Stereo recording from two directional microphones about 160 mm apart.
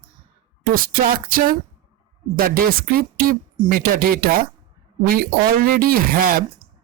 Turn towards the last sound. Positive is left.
turn(degrees=-65)  # may be behind; listen again after turning